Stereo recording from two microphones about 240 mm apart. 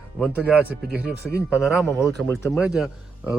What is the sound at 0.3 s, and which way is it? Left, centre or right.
Speech, centre.